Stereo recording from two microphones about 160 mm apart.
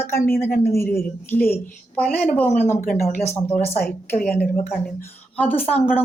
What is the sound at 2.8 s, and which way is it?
Speech, 60° left (ahead or behind).